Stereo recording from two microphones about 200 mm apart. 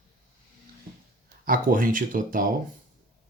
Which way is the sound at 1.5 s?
45° right (ahead or behind).